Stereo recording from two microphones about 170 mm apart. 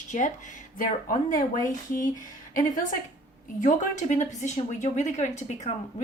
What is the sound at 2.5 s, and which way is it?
A woman's voice, 50° left (ahead or behind).